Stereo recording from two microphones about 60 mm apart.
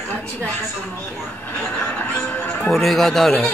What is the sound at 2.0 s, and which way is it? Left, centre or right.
Music, left.